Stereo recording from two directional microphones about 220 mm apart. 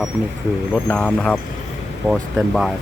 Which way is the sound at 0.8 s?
5° left (ahead or behind).